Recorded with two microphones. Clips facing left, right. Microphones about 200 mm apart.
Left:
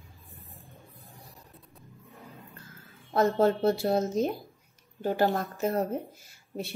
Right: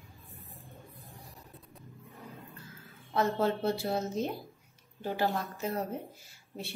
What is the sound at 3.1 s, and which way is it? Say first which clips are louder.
A woman's voice: left 5 dB; 45° left (ahead or behind).